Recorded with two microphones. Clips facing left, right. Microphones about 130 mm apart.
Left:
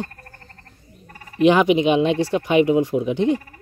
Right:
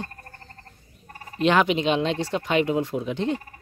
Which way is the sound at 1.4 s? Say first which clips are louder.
Left 5 dB; 15° left (ahead or behind).